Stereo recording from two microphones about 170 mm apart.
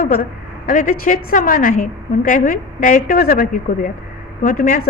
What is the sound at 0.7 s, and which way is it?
A woman's voice, 50° left (ahead or behind).